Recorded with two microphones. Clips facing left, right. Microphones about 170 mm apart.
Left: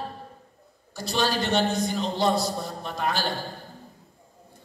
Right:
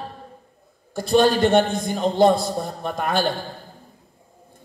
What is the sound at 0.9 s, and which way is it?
A man's voice, 50° right (ahead or behind).